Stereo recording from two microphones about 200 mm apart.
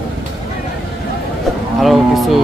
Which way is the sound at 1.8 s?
Centre (ahead or behind).